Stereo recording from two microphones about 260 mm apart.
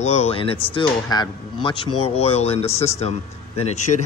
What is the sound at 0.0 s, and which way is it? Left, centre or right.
Speech, left.